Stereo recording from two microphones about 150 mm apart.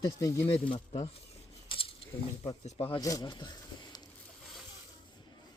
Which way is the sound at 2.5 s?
40° left (ahead or behind).